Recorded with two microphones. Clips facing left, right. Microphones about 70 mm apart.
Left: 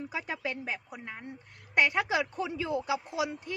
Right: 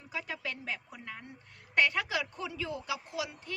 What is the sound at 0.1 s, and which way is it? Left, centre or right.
A woman's voice, left.